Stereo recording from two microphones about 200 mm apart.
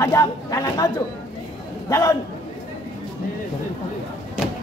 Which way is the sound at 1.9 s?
15° left (ahead or behind).